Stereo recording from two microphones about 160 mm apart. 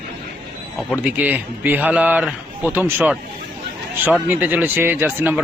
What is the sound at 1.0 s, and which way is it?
A man's voice, 10° right (ahead or behind).